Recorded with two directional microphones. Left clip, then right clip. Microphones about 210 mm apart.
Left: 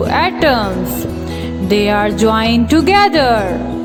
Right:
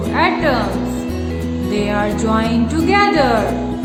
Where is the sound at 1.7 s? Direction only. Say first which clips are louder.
Left 6 dB; 40° left (ahead or behind).